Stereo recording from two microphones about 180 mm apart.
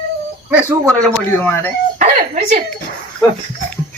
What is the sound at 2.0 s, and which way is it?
Speech, 45° right (ahead or behind).